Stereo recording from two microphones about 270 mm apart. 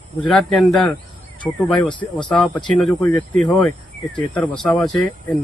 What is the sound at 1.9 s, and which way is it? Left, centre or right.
Speech, centre.